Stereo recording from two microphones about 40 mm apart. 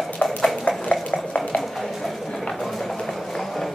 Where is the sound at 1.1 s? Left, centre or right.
Left.